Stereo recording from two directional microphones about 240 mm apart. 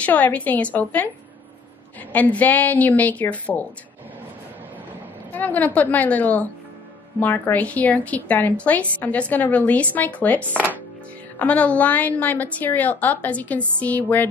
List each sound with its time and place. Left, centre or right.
0.0 s a woman's voice: centre
2.1 s a woman's voice: centre
5.3 s a woman's voice: centre